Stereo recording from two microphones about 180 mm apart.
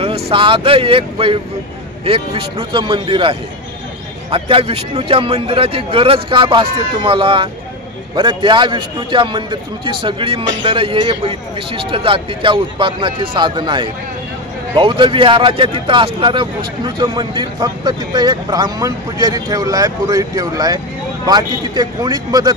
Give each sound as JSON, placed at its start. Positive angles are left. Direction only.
{"t": 0.0, "sound": "speech", "side_deg": -30}